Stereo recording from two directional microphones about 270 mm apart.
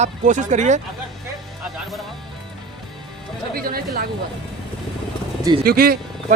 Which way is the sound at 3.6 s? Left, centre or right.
Right.